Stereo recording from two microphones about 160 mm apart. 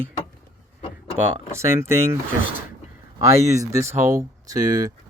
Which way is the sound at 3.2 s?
15° right (ahead or behind).